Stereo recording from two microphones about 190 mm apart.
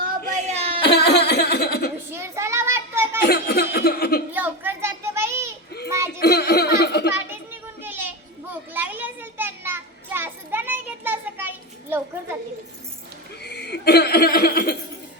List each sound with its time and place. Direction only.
0.5 s a sound: 30° right (ahead or behind)
0.9 s laughter: 60° left (ahead or behind)
2.1 s child singing: 15° right (ahead or behind)
3.2 s laughter: 55° left (ahead or behind)
4.3 s a sound: 10° right (ahead or behind)
6.1 s laughter: 55° left (ahead or behind)
7.1 s children playing: 10° right (ahead or behind)
13.4 s laughter: 60° left (ahead or behind)